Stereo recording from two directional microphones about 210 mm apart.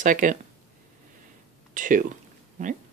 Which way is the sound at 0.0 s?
40° right (ahead or behind).